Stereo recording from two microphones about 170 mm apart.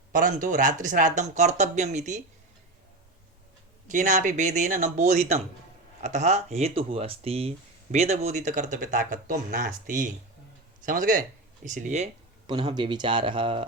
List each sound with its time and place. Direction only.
0.1 s speech: 50° right (ahead or behind)
3.8 s speech: 45° right (ahead or behind); by 13.7 s 30° right (ahead or behind)